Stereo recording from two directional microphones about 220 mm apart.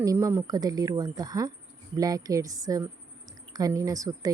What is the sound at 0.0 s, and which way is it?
A woman's voice, 15° right (ahead or behind).